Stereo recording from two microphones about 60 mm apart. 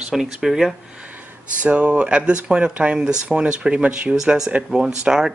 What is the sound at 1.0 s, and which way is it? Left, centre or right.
Speech, right.